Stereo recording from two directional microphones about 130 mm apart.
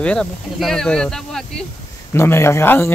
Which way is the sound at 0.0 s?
5° left (ahead or behind).